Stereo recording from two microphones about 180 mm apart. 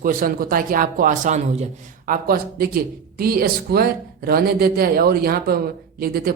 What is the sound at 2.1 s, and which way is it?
A man's voice, 55° right (ahead or behind).